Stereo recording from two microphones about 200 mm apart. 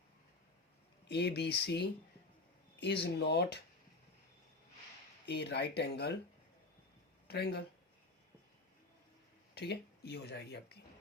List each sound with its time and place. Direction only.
1.0 s speech: 55° left (ahead or behind)
5.2 s speech: 55° left (ahead or behind)
7.3 s speech: 55° left (ahead or behind)
9.6 s speech: 55° left (ahead or behind)